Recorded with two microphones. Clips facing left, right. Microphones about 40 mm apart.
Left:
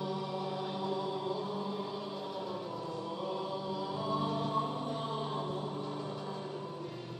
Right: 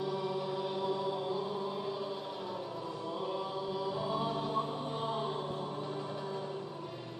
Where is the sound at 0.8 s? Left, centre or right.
Centre.